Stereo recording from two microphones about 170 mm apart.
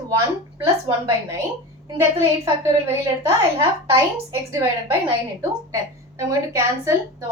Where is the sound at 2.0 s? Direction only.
15° right (ahead or behind).